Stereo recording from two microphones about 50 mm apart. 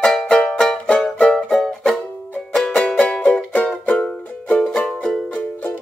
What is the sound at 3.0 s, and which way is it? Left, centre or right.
Music, centre.